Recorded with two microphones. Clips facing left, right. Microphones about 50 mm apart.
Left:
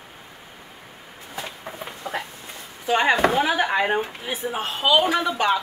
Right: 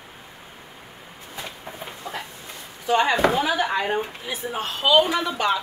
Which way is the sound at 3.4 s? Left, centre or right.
Left.